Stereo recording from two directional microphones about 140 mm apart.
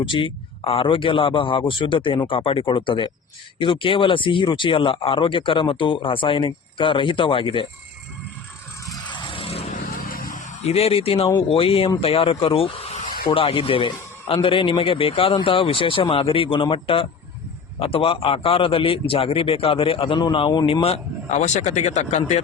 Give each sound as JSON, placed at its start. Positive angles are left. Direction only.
{"t": 0.0, "sound": "speech", "side_deg": 35}
{"t": 9.3, "sound": "vehicle", "side_deg": 45}
{"t": 9.7, "sound": "vehicle", "side_deg": 85}
{"t": 10.6, "sound": "a man's voice", "side_deg": 45}